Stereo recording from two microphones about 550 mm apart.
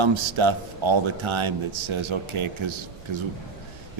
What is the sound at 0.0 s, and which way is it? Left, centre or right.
A man's voice, right.